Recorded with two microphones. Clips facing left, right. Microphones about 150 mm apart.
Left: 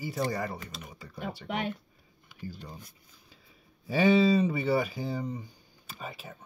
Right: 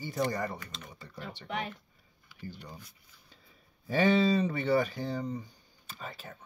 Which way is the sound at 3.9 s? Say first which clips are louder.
Left 3 dB; 5° left (ahead or behind).